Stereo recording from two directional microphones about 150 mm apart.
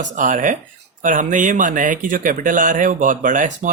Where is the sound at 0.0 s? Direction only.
60° right (ahead or behind).